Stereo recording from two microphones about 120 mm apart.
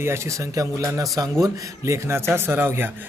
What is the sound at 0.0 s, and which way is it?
A man's voice, 25° right (ahead or behind).